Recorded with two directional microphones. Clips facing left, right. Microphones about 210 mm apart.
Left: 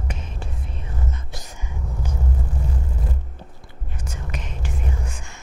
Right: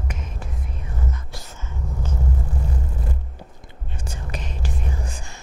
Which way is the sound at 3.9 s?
30° right (ahead or behind).